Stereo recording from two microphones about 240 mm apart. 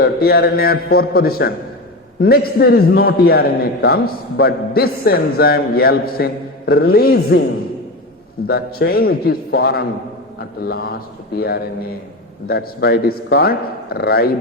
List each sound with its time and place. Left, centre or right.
0.0 s a man's voice: left
8.4 s a man's voice: left